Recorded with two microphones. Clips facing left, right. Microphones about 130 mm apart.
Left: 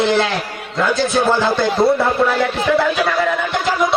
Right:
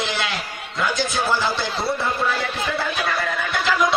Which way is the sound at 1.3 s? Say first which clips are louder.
Left 9 dB; 55° left (ahead or behind).